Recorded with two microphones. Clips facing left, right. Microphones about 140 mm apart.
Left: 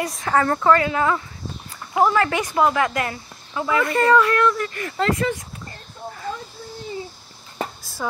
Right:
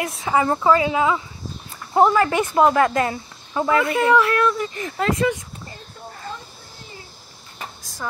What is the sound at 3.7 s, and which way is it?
Speech, 5° right (ahead or behind).